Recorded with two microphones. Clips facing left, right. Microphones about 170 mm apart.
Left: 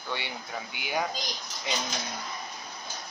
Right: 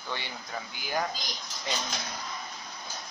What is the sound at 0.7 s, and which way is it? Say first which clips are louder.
Speech: left 2 dB; 65° left (ahead or behind).